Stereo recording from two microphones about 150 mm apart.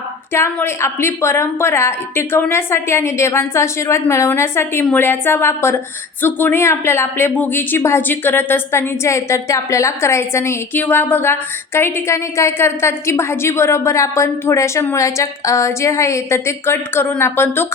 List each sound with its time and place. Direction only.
0.3 s a woman's voice: 15° left (ahead or behind)